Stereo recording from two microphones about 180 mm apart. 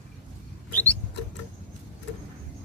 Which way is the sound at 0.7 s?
10° left (ahead or behind).